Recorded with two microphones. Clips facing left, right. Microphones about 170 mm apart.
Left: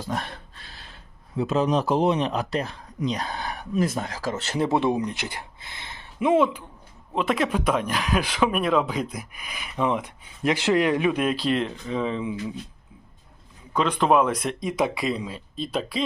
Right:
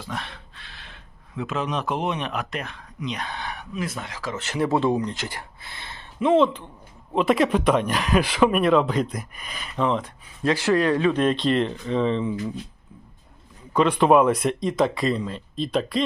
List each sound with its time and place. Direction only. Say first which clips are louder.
0.0 s a sound: left 3 dB; 45° left (ahead or behind)
1.4 s speech: left 5 dB; 35° left (ahead or behind)
4.7 s speech: right 2 dB; 15° left (ahead or behind)
7.1 s speech: right 4 dB; centre (ahead or behind)
13.7 s speech: right 3 dB; centre (ahead or behind)